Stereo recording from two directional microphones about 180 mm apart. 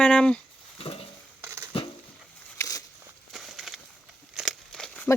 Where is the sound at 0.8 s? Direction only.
30° left (ahead or behind).